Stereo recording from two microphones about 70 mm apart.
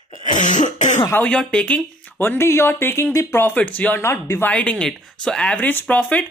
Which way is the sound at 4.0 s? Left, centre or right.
Left.